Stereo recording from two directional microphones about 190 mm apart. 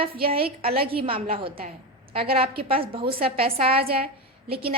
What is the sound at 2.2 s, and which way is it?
Speech, 55° right (ahead or behind).